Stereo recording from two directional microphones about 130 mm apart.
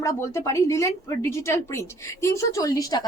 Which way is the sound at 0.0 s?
25° left (ahead or behind).